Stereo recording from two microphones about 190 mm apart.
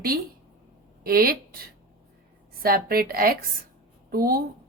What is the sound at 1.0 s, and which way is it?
Speech, 50° right (ahead or behind).